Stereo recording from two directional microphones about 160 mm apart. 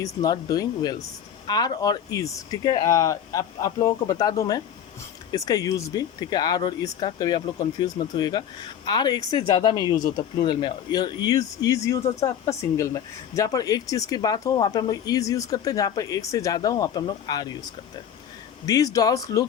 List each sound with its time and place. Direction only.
0.0 s a man's voice: 20° left (ahead or behind)
18.6 s a man's voice: 20° left (ahead or behind)